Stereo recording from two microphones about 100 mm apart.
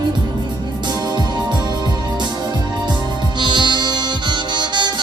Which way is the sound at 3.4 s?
50° right (ahead or behind).